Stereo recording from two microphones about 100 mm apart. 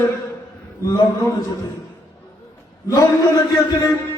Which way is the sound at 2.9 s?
35° left (ahead or behind).